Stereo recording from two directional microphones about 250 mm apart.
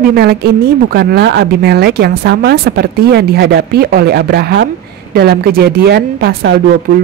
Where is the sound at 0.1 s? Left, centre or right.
Right.